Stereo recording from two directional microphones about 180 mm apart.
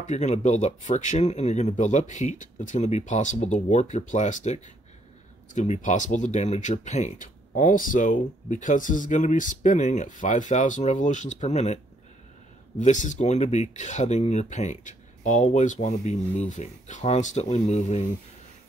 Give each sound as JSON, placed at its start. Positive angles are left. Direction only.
{"t": 0.0, "sound": "speech", "side_deg": 40}